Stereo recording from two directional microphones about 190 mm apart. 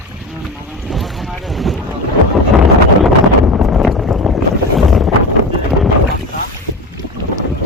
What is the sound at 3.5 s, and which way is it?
Boat, centre (ahead or behind).